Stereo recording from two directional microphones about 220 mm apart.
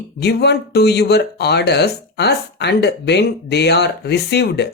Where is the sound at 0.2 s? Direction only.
50° left (ahead or behind).